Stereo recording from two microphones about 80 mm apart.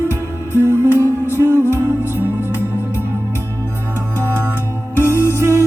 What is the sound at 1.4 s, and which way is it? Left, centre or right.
Music, left.